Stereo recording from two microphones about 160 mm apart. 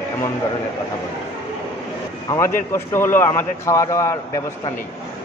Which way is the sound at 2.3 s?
15° left (ahead or behind).